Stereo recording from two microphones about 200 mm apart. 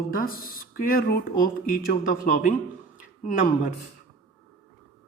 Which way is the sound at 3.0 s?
40° left (ahead or behind).